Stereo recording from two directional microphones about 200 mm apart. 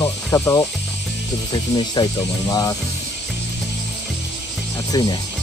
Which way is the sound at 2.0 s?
20° left (ahead or behind).